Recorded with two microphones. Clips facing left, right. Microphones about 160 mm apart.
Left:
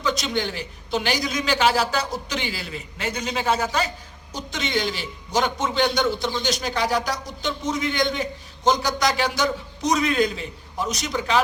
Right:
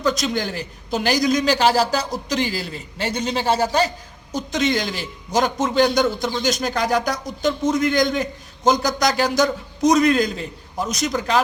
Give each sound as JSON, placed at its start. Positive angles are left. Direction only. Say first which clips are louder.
{"t": 0.0, "sound": "a man's voice", "louder": "right 3 dB", "side_deg": -45}